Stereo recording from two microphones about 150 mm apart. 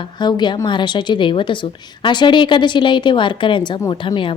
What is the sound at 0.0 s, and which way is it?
A woman's voice, 30° left (ahead or behind).